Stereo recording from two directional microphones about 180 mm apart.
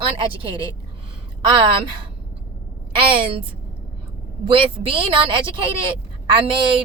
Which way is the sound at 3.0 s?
30° right (ahead or behind).